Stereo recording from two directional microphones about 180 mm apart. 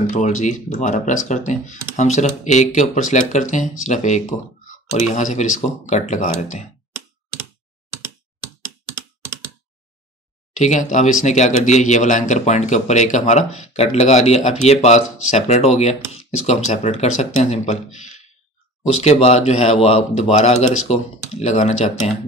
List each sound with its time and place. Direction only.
0.1 s speech: 40° left (ahead or behind)
10.5 s speech: 40° left (ahead or behind)